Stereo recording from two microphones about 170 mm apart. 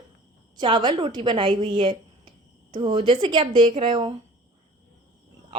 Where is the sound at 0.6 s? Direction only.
25° right (ahead or behind).